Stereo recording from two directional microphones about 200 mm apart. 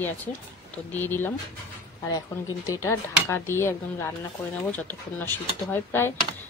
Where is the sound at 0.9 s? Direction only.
10° left (ahead or behind).